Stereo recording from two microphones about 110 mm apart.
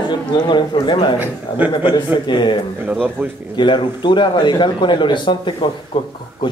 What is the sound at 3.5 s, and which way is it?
A man's voice, 45° left (ahead or behind).